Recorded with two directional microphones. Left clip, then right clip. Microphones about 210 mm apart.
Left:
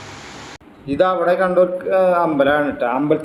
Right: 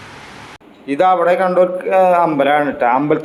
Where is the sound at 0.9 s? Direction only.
Centre (ahead or behind).